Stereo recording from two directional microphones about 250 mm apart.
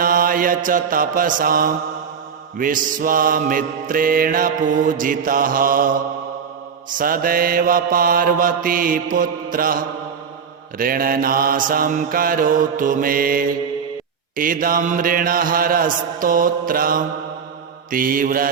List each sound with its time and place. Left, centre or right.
0.0 s mantra: right
7.0 s mantra: right